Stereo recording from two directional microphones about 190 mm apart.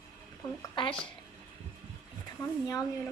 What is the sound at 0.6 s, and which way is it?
Speech, 25° left (ahead or behind).